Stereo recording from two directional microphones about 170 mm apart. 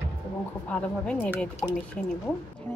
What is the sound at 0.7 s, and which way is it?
A woman's voice, 10° left (ahead or behind).